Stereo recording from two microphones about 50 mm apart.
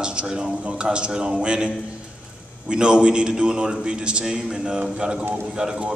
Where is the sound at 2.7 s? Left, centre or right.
Centre.